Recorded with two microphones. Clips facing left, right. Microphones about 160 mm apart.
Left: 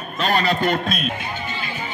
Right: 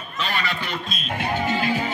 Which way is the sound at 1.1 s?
70° right (ahead or behind).